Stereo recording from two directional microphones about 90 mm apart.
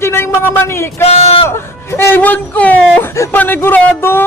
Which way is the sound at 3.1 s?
30° left (ahead or behind).